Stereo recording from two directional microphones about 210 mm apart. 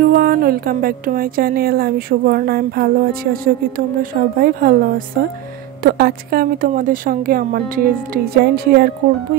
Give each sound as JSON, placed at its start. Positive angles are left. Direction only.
{"t": 0.1, "sound": "speech", "side_deg": -45}